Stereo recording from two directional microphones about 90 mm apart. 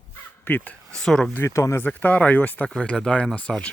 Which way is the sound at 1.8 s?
20° left (ahead or behind).